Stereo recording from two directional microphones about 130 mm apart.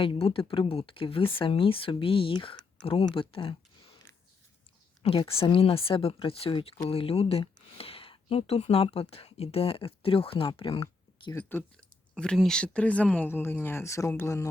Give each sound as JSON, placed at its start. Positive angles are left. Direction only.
{"t": 0.0, "sound": "speech", "side_deg": 45}
{"t": 5.0, "sound": "speech", "side_deg": 45}
{"t": 11.3, "sound": "speech", "side_deg": 15}
{"t": 12.1, "sound": "speech", "side_deg": 5}